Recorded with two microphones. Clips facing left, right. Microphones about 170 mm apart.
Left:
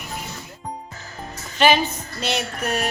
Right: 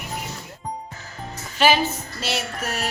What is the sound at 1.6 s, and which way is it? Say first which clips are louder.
Music: left 1 dB; 5° right (ahead or behind).